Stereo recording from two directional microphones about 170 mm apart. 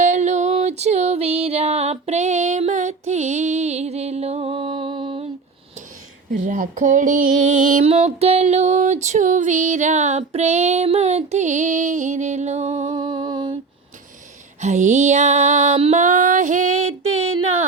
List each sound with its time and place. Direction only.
0.0 s music: 45° right (ahead or behind)
6.3 s music: 50° right (ahead or behind)
7.9 s music: 40° right (ahead or behind)
12.9 s music: 25° right (ahead or behind)
14.6 s music: 45° right (ahead or behind)